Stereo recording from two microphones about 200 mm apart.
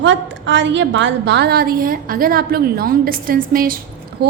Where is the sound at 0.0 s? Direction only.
65° right (ahead or behind); by 3.8 s 45° right (ahead or behind).